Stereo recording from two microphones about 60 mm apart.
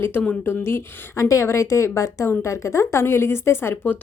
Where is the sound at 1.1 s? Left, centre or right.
Left.